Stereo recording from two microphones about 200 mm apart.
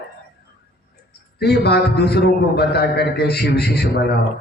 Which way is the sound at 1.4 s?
55° left (ahead or behind).